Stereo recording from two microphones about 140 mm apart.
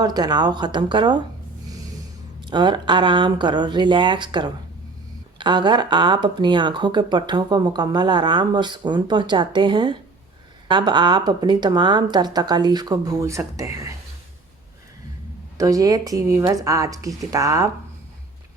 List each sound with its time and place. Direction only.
0.0 s speech: 30° right (ahead or behind)
2.5 s speech: 30° right (ahead or behind)
15.5 s speech: 25° right (ahead or behind)